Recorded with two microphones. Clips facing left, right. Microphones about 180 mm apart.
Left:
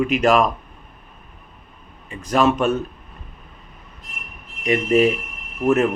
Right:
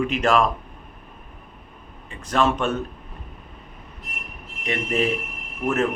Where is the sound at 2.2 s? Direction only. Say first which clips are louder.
Left 4 dB; 10° left (ahead or behind).